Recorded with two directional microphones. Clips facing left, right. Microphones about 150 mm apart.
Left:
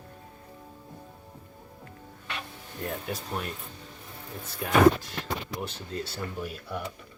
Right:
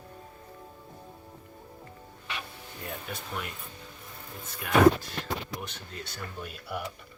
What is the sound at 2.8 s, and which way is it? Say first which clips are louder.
Speech: left 5 dB; 40° left (ahead or behind).